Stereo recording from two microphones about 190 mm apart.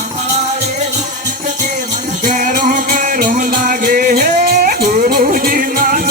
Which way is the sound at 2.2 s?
40° right (ahead or behind).